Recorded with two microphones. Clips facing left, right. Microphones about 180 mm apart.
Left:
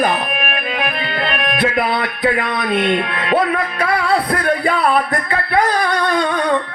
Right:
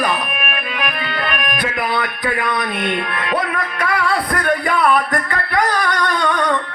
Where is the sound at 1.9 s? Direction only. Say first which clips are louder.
Left 3 dB; 25° left (ahead or behind).